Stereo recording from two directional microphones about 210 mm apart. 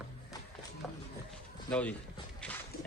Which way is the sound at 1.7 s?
5° left (ahead or behind).